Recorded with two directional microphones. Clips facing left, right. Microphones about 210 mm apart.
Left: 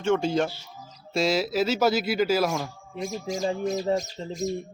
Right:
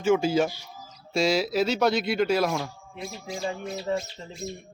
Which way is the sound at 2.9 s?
45° left (ahead or behind).